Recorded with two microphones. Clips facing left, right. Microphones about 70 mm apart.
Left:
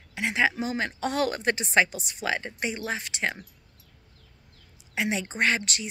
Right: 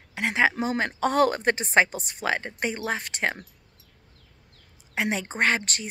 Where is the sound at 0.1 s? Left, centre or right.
Right.